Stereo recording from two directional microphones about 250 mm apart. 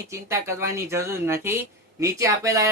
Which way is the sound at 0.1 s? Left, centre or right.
Centre.